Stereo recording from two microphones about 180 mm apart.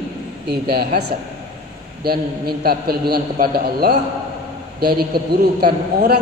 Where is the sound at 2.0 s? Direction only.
60° right (ahead or behind).